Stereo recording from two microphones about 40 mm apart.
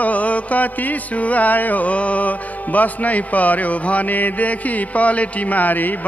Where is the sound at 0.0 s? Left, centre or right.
Left.